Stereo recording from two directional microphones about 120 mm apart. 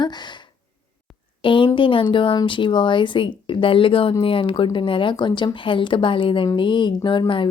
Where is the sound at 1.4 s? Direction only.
45° left (ahead or behind).